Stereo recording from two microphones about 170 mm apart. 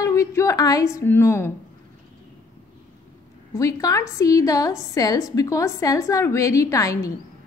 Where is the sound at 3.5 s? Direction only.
20° left (ahead or behind).